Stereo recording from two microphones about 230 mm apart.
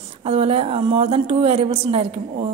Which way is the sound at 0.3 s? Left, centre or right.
Right.